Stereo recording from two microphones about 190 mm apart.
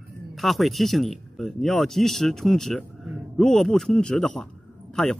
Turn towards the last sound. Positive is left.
turn(degrees=5)  # may be behind; listen again after turning